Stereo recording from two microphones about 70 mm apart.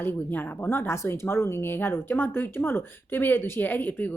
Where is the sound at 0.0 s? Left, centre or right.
Left.